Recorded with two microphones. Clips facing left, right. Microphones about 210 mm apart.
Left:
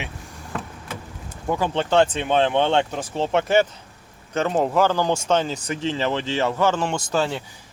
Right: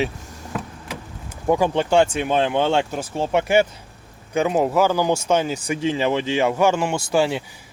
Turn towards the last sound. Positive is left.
turn(degrees=-10)  # may be behind; listen again after turning